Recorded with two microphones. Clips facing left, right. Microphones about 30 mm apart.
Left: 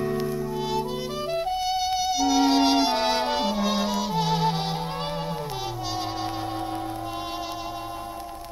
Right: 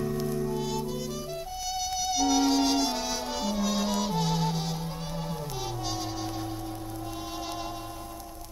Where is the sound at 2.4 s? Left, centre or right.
Left.